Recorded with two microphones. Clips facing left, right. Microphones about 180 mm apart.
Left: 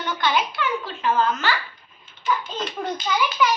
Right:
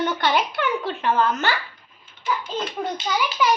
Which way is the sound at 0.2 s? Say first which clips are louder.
Right 1 dB; 60° right (ahead or behind).